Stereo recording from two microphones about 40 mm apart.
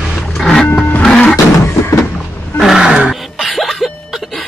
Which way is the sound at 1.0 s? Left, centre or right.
Centre.